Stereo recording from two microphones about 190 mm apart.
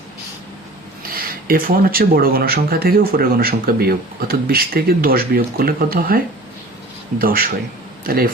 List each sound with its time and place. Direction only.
1.1 s speech: 50° right (ahead or behind)